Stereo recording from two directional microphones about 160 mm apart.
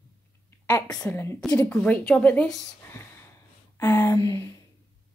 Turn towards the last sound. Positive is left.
turn(degrees=15)  # may be behind; listen again after turning